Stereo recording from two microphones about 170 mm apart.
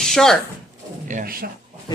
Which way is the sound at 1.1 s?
55° right (ahead or behind).